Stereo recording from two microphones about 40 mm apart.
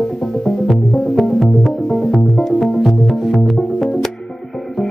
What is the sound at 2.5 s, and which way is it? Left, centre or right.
Music, centre.